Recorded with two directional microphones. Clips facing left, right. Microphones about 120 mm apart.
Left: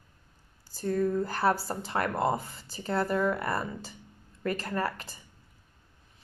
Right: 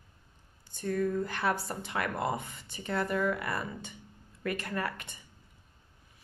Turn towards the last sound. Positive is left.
turn(degrees=30)  # may be behind; listen again after turning